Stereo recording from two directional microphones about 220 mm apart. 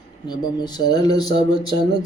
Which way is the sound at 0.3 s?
20° left (ahead or behind).